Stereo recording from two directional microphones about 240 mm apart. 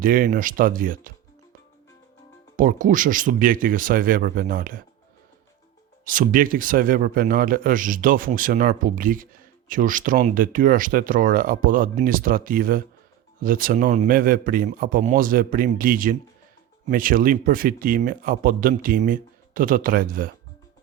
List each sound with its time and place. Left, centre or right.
0.0 s speech: right
2.6 s speech: right
6.1 s speech: right